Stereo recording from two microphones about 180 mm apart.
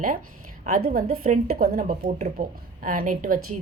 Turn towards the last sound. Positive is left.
turn(degrees=-50)  # may be behind; listen again after turning